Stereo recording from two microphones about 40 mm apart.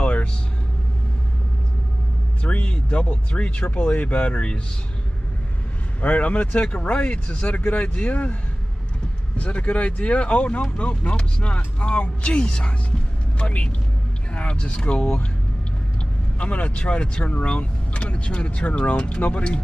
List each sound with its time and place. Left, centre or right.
0.0 s vehicle: left
2.4 s speech: left
5.9 s speech: left
9.4 s speech: left
16.3 s speech: left